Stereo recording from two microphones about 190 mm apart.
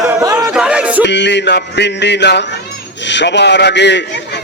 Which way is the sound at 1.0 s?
65° left (ahead or behind).